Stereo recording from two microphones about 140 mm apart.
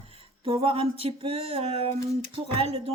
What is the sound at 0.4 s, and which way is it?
Speech, 40° right (ahead or behind).